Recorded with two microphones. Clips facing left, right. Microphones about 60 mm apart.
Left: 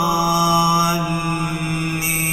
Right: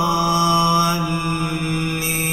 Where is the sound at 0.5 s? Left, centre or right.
Centre.